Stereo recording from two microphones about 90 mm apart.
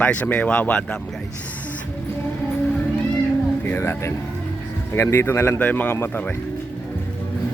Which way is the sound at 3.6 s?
25° left (ahead or behind).